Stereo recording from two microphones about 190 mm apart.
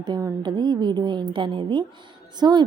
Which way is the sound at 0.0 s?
20° right (ahead or behind).